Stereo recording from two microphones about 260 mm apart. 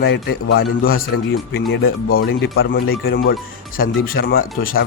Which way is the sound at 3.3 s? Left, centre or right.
Left.